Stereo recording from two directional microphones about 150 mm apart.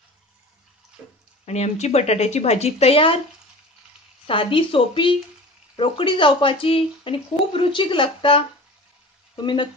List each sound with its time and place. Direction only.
1.4 s speech: 45° left (ahead or behind)
4.3 s speech: 35° left (ahead or behind)